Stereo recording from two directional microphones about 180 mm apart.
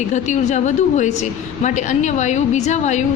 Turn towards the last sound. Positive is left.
turn(degrees=40)  # may be behind; listen again after turning